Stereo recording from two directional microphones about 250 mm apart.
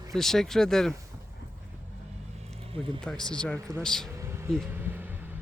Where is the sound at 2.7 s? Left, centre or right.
Right.